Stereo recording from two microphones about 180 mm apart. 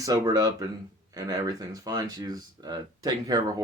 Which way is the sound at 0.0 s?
20° right (ahead or behind).